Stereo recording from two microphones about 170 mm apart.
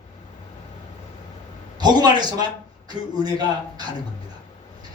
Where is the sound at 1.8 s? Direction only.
25° right (ahead or behind).